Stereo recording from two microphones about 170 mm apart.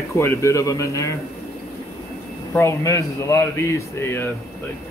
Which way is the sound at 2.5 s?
15° left (ahead or behind).